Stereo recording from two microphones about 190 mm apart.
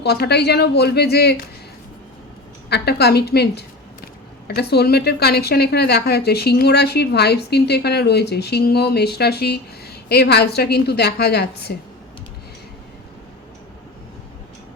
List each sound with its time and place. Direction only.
0.0 s a woman's voice: 60° left (ahead or behind)
2.6 s a woman's voice: 60° left (ahead or behind)